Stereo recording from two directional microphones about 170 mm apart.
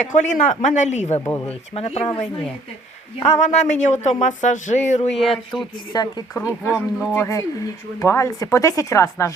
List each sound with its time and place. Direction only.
0.0 s speech: 45° left (ahead or behind)
3.2 s speech: 40° left (ahead or behind)
5.1 s speech: centre (ahead or behind)
5.9 s speech: 25° left (ahead or behind)